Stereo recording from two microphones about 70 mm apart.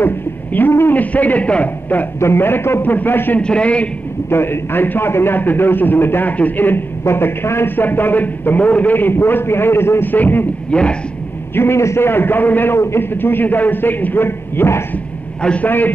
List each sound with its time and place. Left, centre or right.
0.0 s a man's voice: left
2.1 s a man's voice: left
3.3 s a man's voice: centre
4.3 s a man's voice: left
11.5 s a man's voice: left
15.4 s a man's voice: centre